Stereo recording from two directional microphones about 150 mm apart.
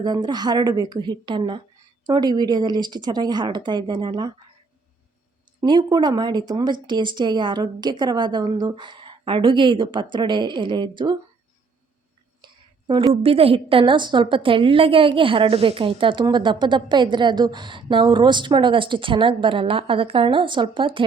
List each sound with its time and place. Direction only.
0.0 s speech: 30° right (ahead or behind)
5.5 s a woman's voice: 30° right (ahead or behind)
13.2 s a woman's voice: 40° right (ahead or behind)